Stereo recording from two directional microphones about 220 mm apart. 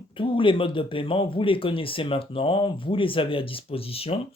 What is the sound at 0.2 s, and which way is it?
Speech, 25° left (ahead or behind).